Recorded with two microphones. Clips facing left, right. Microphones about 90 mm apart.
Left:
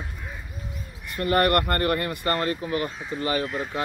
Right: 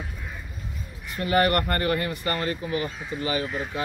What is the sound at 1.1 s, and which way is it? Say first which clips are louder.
Speech: left 1 dB; 55° left (ahead or behind).